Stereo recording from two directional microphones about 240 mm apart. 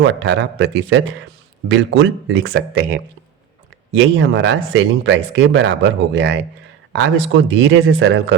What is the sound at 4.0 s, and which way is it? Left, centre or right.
Speech, right.